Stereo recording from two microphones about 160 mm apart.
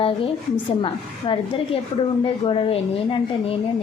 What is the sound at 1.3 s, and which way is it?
A woman's voice, 35° left (ahead or behind).